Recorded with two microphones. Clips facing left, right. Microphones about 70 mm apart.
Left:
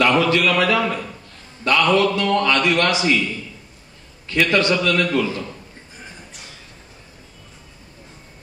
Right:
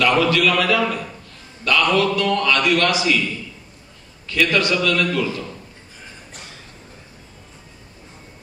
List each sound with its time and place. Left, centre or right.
0.0 s a man's voice: left
4.3 s a man's voice: left